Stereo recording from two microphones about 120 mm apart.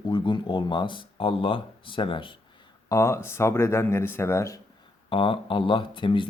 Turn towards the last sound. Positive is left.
turn(degrees=45)  # may be behind; listen again after turning